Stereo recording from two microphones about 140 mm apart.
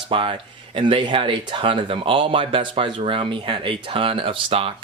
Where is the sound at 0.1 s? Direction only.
40° right (ahead or behind).